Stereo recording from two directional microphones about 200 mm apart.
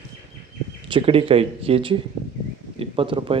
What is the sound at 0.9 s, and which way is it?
Speech, 30° right (ahead or behind).